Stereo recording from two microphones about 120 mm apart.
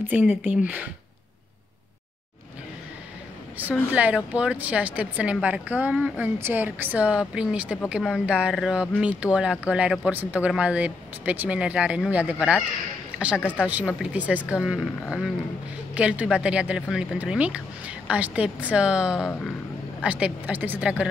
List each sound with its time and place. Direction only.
0.1 s speech: 10° right (ahead or behind)
3.9 s speech: 10° right (ahead or behind)